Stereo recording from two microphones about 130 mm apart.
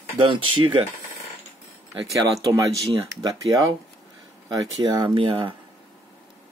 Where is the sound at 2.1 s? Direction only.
25° right (ahead or behind); by 5.5 s 40° right (ahead or behind).